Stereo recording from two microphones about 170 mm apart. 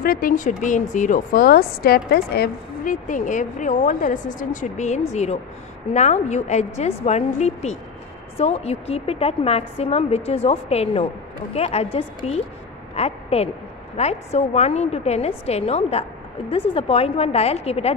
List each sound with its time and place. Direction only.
0.0 s a woman's voice: 55° left (ahead or behind); by 17.9 s 35° left (ahead or behind)